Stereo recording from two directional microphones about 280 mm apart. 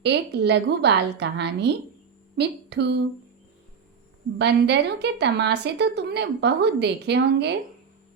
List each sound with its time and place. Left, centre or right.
0.0 s speech: right
4.4 s speech: right